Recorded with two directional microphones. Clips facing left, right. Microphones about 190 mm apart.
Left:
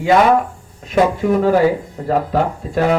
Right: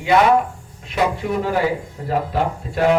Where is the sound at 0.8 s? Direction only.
45° left (ahead or behind).